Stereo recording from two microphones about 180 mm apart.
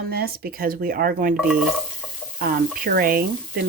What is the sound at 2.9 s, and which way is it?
Speech, 55° right (ahead or behind).